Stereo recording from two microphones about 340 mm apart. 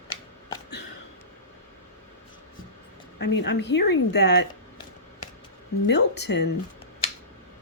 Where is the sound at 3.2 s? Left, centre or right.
Left.